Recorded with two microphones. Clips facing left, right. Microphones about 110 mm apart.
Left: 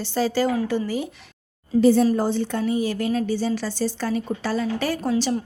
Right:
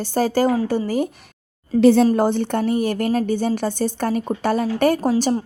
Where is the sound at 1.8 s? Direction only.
75° right (ahead or behind).